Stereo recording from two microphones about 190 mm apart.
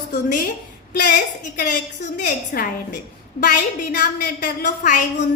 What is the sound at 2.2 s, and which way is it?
Speech, 45° left (ahead or behind).